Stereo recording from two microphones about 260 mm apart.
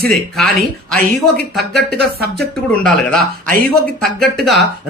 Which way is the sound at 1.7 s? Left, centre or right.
Right.